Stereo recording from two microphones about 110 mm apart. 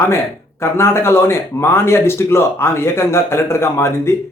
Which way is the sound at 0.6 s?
25° left (ahead or behind).